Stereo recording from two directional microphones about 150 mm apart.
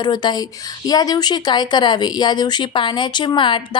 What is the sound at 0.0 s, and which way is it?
A woman's voice, 30° left (ahead or behind).